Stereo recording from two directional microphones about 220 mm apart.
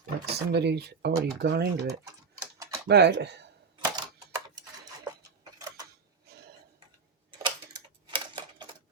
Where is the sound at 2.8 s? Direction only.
50° right (ahead or behind).